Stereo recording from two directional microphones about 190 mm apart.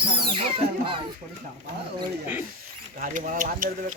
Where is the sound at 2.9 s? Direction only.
45° right (ahead or behind).